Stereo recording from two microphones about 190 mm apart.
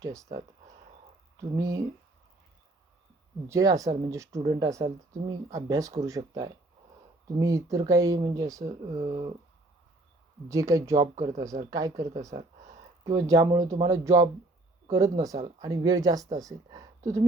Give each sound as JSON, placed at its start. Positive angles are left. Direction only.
{"t": 0.0, "sound": "speech", "side_deg": -15}
{"t": 1.5, "sound": "speech", "side_deg": -15}
{"t": 3.5, "sound": "speech", "side_deg": -20}
{"t": 9.0, "sound": "speech", "side_deg": -35}
{"t": 10.5, "sound": "speech", "side_deg": -15}